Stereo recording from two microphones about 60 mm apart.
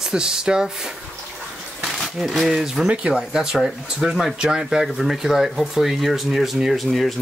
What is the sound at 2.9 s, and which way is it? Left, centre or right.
Speech, centre.